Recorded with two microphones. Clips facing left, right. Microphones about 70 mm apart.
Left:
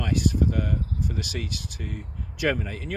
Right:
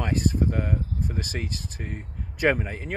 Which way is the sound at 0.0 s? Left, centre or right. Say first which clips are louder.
Even; right.